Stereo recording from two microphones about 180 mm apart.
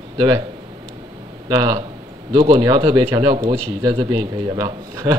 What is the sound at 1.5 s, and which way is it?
A man's voice, 20° right (ahead or behind).